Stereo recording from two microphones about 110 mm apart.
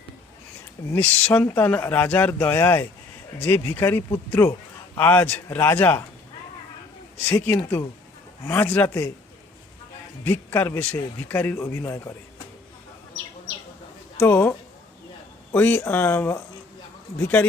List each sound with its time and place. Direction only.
0.9 s speech: 15° left (ahead or behind)
7.3 s speech: 15° left (ahead or behind)
10.2 s speech: 20° left (ahead or behind)
14.2 s speech: 15° left (ahead or behind)
15.5 s speech: 15° left (ahead or behind)